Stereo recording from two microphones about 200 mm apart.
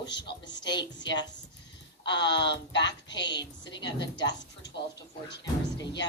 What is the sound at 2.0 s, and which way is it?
Speech, 20° left (ahead or behind).